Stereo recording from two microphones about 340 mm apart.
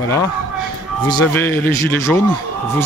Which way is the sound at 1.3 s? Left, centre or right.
Centre.